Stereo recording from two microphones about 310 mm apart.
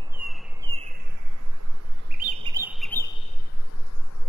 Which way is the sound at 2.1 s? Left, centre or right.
Right.